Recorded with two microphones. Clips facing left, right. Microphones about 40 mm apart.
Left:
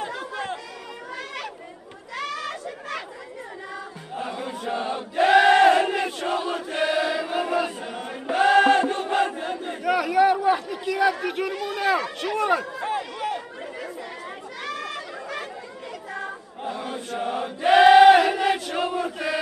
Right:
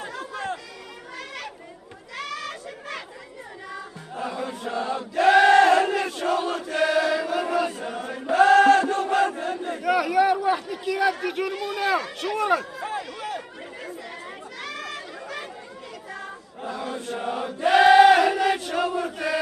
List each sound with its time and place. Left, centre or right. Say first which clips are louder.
0.0 s chatter: left 2 dB; left
1.1 s chatter: left 2 dB; centre
2.1 s a sound: left 2 dB; centre
4.1 s chant: right 1 dB; left
9.8 s a sound: left 1 dB; centre
14.6 s chatter: left 3 dB; centre
16.6 s chant: even; left
18.8 s chant: right 1 dB; left
19.0 s chant: even; centre